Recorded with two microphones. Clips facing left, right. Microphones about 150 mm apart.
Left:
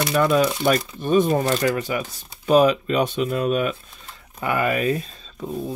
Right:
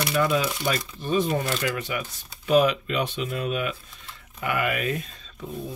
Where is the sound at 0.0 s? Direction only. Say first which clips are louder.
Left 5 dB; 45° left (ahead or behind).